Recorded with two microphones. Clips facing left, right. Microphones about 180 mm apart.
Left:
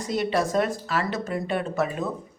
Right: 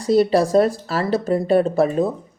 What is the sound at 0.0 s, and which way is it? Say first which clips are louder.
Speech: right 9 dB; 35° right (ahead or behind).